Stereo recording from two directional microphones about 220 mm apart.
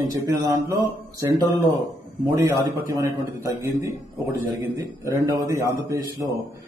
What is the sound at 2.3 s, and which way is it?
A man's voice, 15° right (ahead or behind).